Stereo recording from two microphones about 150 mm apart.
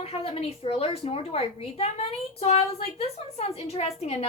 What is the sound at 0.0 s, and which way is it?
A woman's voice, 40° left (ahead or behind).